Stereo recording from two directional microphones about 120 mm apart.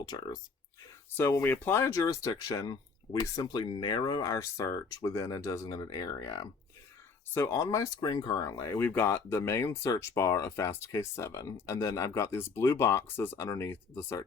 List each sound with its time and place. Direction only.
0.0 s speech: 30° left (ahead or behind)
1.1 s speech: 20° left (ahead or behind)
8.9 s speech: 15° left (ahead or behind)